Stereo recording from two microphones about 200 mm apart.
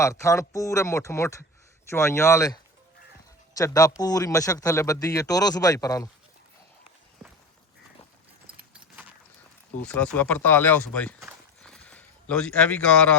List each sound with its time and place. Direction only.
0.0 s speech: 15° left (ahead or behind)
3.6 s speech: 15° left (ahead or behind)
8.5 s keys jangling: 5° right (ahead or behind)
9.8 s speech: 10° left (ahead or behind)